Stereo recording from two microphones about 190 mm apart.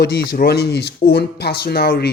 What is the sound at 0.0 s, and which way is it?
Speech, 60° left (ahead or behind).